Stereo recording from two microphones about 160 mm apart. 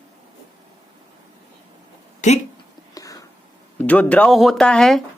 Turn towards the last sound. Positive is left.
turn(degrees=0)  # may be behind; listen again after turning